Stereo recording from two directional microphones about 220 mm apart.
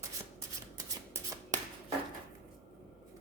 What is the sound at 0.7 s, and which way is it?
Shuffling cards, 15° right (ahead or behind).